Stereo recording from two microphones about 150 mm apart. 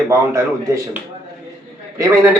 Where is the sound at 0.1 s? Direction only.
20° right (ahead or behind).